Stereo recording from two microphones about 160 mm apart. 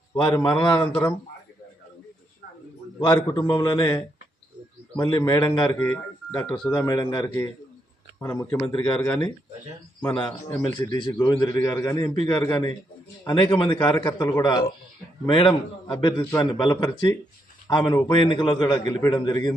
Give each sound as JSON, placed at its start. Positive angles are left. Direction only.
{"t": 0.2, "sound": "a man's voice", "side_deg": 30}
{"t": 3.0, "sound": "a man's voice", "side_deg": 25}
{"t": 14.1, "sound": "a man's voice", "side_deg": 15}